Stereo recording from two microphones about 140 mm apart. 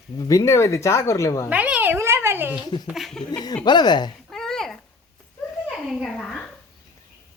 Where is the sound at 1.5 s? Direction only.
10° right (ahead or behind).